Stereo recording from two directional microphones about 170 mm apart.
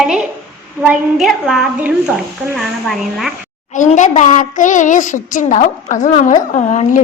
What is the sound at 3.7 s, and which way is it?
A child's voice, 45° left (ahead or behind).